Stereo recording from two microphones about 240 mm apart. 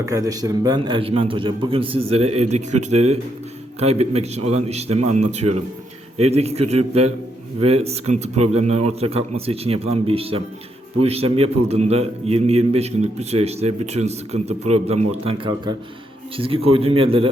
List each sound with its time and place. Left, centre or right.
0.1 s a man's voice: centre